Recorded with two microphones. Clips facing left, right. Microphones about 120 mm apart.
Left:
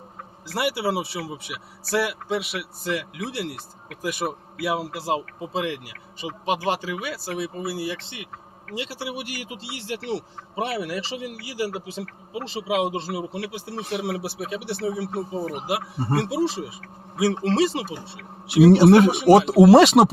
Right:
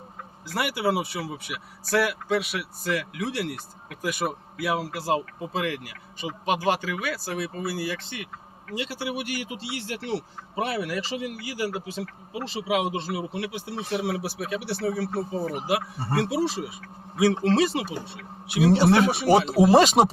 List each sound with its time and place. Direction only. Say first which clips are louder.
0.5 s speech: left 1 dB; 30° left (ahead or behind)
19.3 s speech: left 6 dB; 75° left (ahead or behind)